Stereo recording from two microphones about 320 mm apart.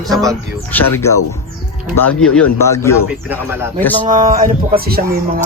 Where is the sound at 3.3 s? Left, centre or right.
Centre.